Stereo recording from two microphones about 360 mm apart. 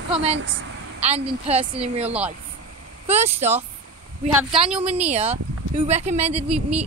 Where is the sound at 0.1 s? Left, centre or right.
Centre.